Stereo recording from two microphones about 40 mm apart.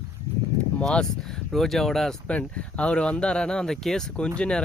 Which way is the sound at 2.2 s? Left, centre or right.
Left.